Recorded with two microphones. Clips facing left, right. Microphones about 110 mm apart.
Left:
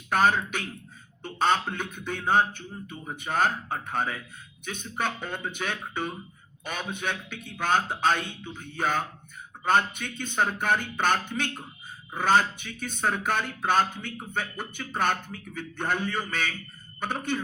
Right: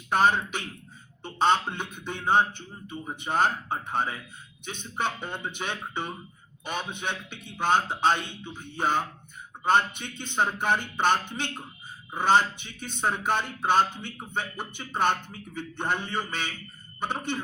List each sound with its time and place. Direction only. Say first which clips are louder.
0.1 s speech: even; 20° right (ahead or behind)